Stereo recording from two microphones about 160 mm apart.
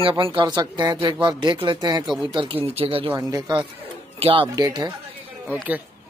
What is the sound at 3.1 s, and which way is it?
Speech, 25° right (ahead or behind).